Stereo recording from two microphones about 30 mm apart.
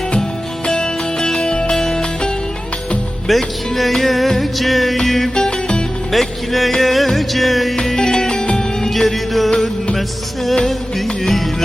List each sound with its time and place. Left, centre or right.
0.6 s music: left
1.7 s music: centre
3.2 s speech: centre
4.9 s music: centre
5.3 s music: left
6.1 s music: centre
7.9 s music: centre
9.0 s music: centre
10.7 s music: centre